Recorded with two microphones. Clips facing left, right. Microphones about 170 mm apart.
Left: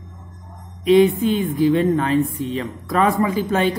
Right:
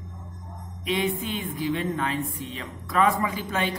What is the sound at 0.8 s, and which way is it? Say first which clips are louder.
A woman's voice: left 13 dB; 40° left (ahead or behind).